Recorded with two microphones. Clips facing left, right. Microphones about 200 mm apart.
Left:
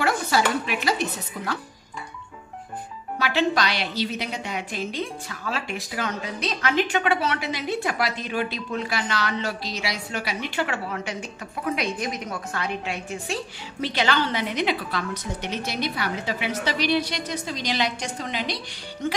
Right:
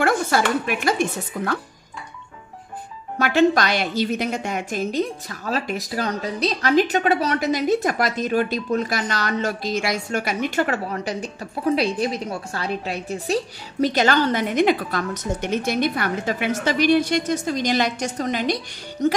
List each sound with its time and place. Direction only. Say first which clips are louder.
0.0 s a woman's voice: right 3 dB; 50° right (ahead or behind)
3.2 s a woman's voice: right 6 dB; 50° right (ahead or behind)